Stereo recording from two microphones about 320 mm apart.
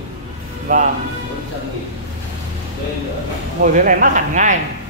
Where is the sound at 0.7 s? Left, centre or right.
Right.